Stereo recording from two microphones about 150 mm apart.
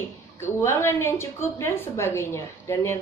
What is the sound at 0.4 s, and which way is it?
A woman's voice, 20° left (ahead or behind).